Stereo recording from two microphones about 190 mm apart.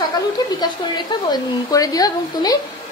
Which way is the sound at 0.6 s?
20° left (ahead or behind).